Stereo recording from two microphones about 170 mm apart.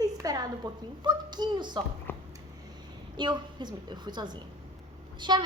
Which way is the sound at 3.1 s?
25° right (ahead or behind).